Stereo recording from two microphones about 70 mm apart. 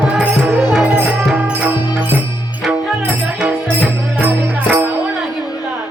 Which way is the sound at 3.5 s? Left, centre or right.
Right.